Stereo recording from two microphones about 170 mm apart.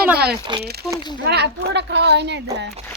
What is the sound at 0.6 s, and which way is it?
A woman's voice, 70° right (ahead or behind).